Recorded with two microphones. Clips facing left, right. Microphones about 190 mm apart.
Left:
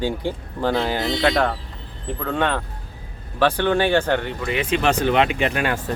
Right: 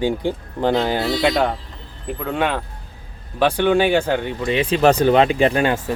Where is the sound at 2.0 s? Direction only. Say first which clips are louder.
Right 1 dB; 10° right (ahead or behind).